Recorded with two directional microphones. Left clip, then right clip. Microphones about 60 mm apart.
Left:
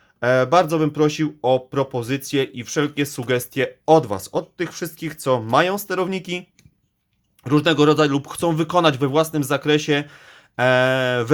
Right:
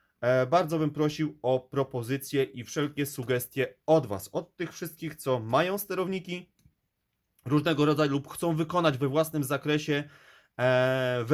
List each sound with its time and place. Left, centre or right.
0.2 s speech: centre
7.4 s speech: centre